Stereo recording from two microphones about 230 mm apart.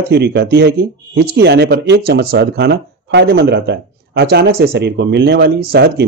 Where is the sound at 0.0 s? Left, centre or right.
Right.